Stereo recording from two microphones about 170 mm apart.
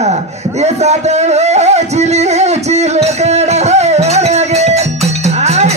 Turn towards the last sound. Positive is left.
turn(degrees=-40)  # may be behind; listen again after turning